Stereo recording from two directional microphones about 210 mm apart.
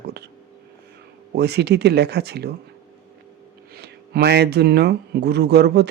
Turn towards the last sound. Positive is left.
turn(degrees=-50)  # may be behind; listen again after turning